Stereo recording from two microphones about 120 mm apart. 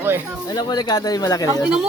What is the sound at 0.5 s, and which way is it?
Speech, 35° left (ahead or behind).